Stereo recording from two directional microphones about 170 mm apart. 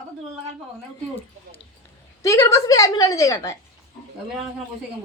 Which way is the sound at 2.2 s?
20° left (ahead or behind).